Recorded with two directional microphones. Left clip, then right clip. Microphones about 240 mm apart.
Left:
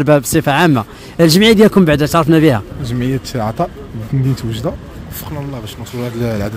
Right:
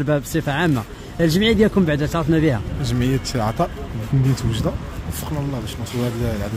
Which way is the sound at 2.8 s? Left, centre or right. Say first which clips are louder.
Left 3 dB; centre.